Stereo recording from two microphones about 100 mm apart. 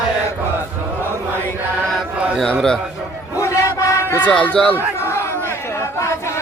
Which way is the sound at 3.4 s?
30° left (ahead or behind).